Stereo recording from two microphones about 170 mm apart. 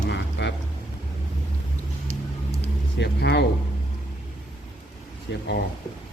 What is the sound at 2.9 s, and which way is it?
Speech, 90° left.